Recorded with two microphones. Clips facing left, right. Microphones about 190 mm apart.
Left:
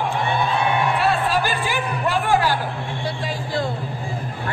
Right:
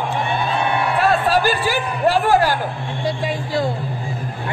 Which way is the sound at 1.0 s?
40° right (ahead or behind).